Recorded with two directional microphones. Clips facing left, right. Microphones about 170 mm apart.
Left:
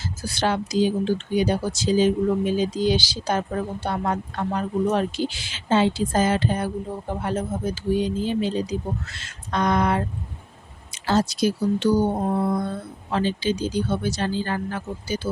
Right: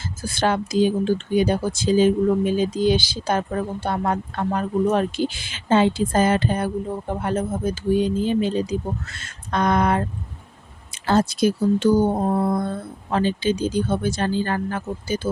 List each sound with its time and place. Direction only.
0.2 s speech: 50° right (ahead or behind)